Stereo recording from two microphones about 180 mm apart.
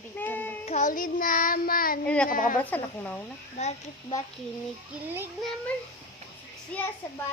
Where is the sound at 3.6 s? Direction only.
35° left (ahead or behind).